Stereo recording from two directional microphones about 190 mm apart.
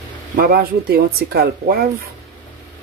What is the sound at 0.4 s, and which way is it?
Speech, 55° right (ahead or behind).